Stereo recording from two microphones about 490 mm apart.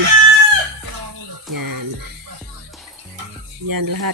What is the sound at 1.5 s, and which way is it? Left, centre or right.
Music, right.